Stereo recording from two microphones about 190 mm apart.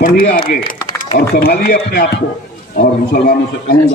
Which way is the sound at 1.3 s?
55° left (ahead or behind).